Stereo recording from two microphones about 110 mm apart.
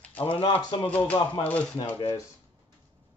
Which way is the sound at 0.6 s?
40° left (ahead or behind).